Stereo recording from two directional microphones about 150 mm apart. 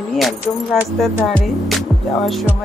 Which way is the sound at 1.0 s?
Centre (ahead or behind).